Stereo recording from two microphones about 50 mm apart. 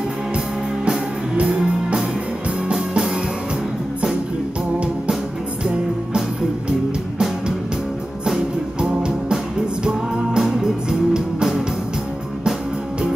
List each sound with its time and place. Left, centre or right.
0.8 s music: centre
8.8 s music: centre